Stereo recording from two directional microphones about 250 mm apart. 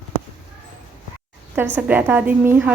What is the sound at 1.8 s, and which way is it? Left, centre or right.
Speech, centre.